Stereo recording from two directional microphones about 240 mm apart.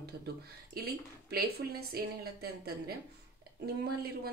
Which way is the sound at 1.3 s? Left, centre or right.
Right.